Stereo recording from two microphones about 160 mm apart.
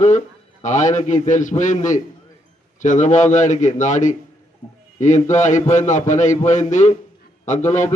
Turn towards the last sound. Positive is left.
turn(degrees=50)  # may be behind; listen again after turning